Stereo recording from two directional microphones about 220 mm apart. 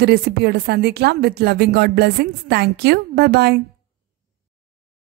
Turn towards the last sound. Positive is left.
turn(degrees=-50)  # may be behind; listen again after turning